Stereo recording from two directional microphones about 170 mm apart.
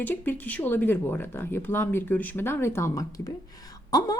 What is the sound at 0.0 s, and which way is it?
Speech, 10° left (ahead or behind).